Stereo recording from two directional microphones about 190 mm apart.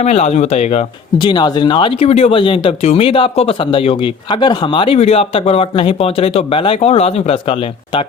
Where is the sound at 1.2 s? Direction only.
25° left (ahead or behind).